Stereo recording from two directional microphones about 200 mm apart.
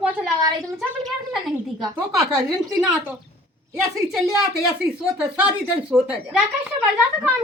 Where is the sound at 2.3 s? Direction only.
20° right (ahead or behind).